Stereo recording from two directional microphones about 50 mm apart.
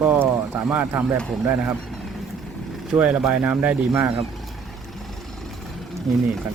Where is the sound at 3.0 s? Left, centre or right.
Right.